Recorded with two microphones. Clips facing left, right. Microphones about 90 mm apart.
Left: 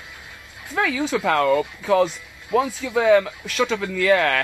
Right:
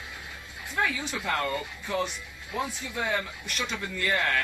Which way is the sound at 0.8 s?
90° left.